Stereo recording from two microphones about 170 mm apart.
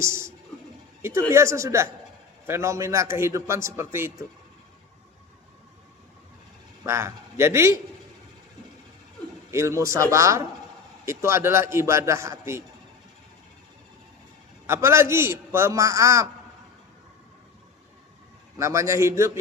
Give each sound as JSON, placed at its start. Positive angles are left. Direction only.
{"t": 1.3, "sound": "a man's voice", "side_deg": -15}
{"t": 6.8, "sound": "a man's voice", "side_deg": -15}
{"t": 9.5, "sound": "a man's voice", "side_deg": -15}
{"t": 14.7, "sound": "a man's voice", "side_deg": -15}
{"t": 18.5, "sound": "a man's voice", "side_deg": -15}